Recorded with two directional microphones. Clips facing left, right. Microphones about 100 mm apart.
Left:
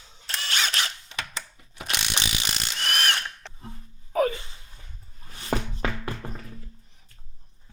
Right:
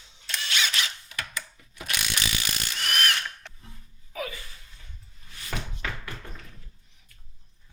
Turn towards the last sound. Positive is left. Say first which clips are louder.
# left 6 dB
turn(degrees=35)  # may be behind; listen again after turning